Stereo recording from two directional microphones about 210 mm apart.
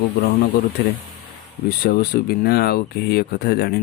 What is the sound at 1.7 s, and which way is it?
Speech, 45° left (ahead or behind).